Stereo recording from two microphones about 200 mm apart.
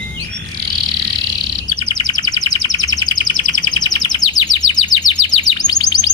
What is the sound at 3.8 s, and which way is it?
Chirp, 20° left (ahead or behind).